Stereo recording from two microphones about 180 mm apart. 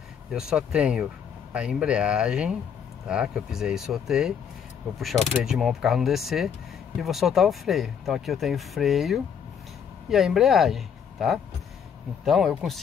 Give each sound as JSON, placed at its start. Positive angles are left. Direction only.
{"t": 0.3, "sound": "speech", "side_deg": -5}